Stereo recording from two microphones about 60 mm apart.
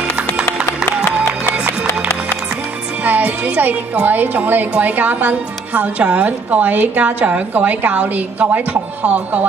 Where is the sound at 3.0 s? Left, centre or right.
Right.